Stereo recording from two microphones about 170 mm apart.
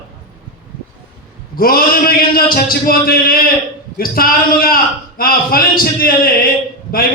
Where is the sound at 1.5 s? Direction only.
60° left (ahead or behind).